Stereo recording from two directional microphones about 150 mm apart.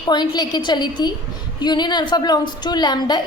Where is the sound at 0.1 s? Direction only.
30° left (ahead or behind).